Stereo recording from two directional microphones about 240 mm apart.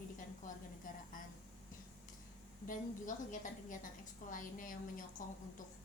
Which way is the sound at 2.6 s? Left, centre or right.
Left.